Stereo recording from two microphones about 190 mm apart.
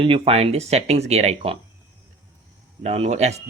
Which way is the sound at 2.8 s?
35° right (ahead or behind).